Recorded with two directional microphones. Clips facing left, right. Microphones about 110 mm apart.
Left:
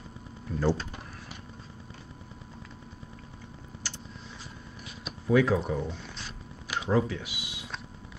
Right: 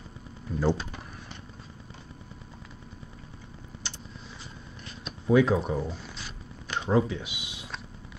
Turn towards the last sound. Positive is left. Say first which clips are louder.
# right 2 dB
turn(degrees=-20)  # may be behind; listen again after turning